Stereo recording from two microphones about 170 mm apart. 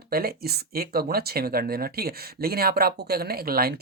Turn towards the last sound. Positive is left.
turn(degrees=-60)  # may be behind; listen again after turning